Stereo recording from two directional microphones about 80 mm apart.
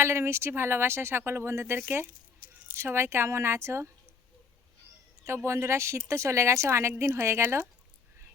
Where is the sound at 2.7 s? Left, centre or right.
Right.